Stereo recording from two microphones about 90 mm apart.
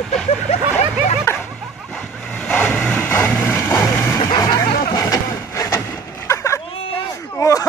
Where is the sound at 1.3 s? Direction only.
25° left (ahead or behind).